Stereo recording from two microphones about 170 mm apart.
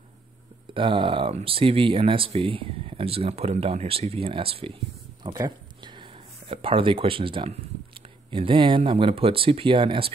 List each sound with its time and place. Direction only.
0.7 s speech: 30° right (ahead or behind)
5.2 s a sound: 25° right (ahead or behind)
6.5 s speech: 30° right (ahead or behind)